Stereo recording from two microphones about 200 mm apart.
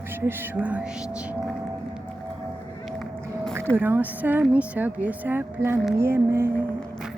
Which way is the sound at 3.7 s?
10° right (ahead or behind).